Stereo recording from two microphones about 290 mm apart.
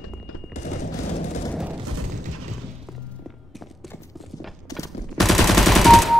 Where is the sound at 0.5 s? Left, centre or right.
Left.